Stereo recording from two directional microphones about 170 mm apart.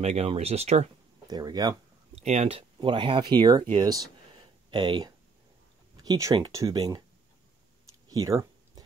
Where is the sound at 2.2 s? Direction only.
40° right (ahead or behind).